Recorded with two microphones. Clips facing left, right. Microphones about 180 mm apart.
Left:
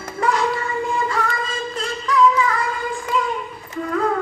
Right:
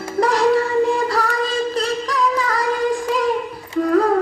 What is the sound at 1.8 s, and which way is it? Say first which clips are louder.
Music: left 2 dB; 35° right (ahead or behind).